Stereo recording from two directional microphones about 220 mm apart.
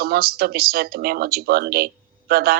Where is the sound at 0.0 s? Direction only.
45° right (ahead or behind).